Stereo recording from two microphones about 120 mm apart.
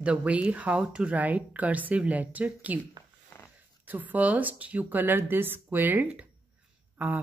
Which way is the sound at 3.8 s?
15° right (ahead or behind).